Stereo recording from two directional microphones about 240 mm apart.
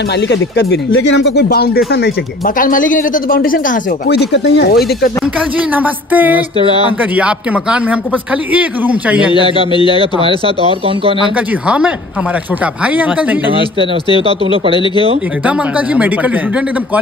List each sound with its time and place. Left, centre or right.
0.3 s speech: left
5.8 s speech: centre
9.7 s speech: centre
11.6 s speech: centre
13.7 s speech: centre
15.4 s speech: centre